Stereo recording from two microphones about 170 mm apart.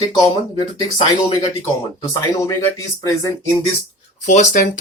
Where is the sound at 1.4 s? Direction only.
25° left (ahead or behind).